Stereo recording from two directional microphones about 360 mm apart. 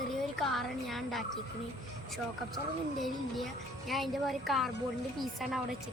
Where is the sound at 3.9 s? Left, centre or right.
Centre.